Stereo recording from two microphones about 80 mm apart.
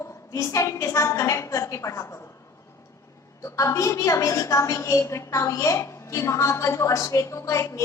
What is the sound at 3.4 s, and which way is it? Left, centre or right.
A woman's voice, left.